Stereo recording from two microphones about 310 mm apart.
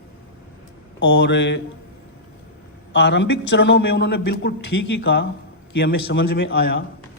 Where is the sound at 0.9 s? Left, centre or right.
Left.